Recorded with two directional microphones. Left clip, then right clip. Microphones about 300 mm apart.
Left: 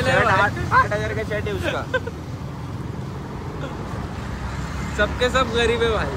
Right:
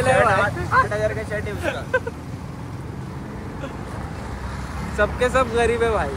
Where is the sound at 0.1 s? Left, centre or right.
Centre.